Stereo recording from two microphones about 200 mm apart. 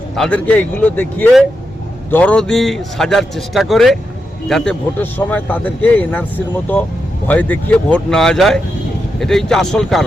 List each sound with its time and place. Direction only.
0.2 s a man's voice: 5° left (ahead or behind)